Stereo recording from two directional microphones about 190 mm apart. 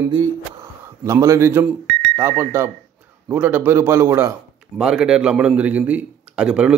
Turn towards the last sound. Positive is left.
turn(degrees=-5)  # may be behind; listen again after turning